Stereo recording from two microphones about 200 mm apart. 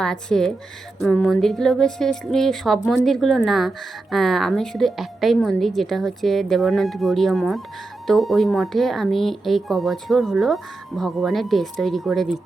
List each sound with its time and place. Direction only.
0.0 s speech: 5° left (ahead or behind)